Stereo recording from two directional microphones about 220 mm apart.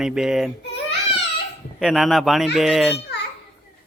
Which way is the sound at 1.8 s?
Centre (ahead or behind).